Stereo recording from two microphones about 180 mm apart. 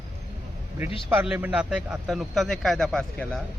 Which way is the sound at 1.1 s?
10° right (ahead or behind).